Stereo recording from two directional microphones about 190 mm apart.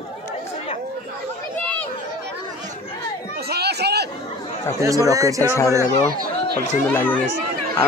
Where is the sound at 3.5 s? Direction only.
60° right (ahead or behind).